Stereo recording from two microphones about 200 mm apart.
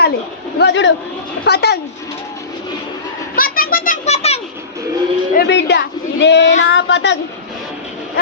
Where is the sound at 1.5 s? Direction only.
55° left (ahead or behind).